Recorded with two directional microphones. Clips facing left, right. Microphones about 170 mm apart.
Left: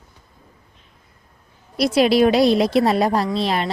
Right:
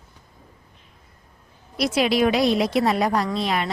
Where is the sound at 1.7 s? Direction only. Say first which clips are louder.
Left 5 dB; 35° left (ahead or behind).